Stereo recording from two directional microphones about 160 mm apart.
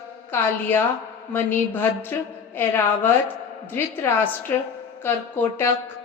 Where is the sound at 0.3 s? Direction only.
15° left (ahead or behind).